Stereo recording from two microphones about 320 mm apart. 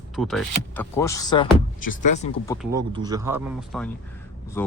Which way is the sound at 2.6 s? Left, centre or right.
Centre.